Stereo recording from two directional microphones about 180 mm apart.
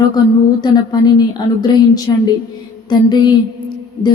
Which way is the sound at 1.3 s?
25° left (ahead or behind).